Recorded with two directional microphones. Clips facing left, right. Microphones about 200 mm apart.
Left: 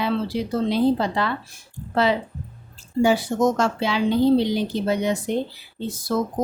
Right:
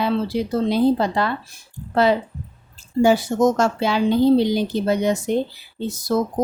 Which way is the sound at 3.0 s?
45° right (ahead or behind).